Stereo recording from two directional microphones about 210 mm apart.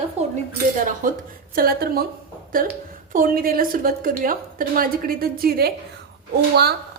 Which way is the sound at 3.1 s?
45° right (ahead or behind).